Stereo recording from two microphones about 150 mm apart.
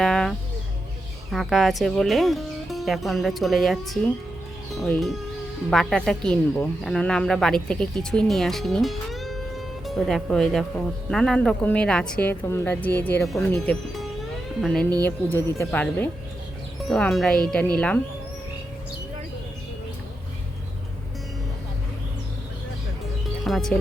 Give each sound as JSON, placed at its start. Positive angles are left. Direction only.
{"t": 0.0, "sound": "bird", "side_deg": 0}
{"t": 1.3, "sound": "a woman's voice", "side_deg": 0}
{"t": 13.2, "sound": "a woman's voice", "side_deg": 0}
{"t": 13.7, "sound": "music", "side_deg": 0}
{"t": 15.4, "sound": "speech", "side_deg": 20}
{"t": 16.8, "sound": "a woman's voice", "side_deg": 0}
{"t": 23.4, "sound": "music", "side_deg": 0}